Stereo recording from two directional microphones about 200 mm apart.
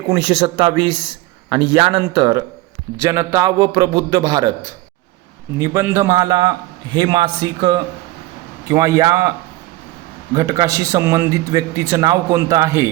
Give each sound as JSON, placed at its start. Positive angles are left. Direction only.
{"t": 0.1, "sound": "a man's voice", "side_deg": -20}
{"t": 10.3, "sound": "a man's voice", "side_deg": -15}